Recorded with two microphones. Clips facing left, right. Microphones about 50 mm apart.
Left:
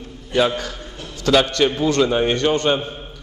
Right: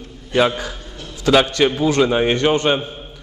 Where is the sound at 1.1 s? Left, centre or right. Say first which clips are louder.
Right 2 dB; centre.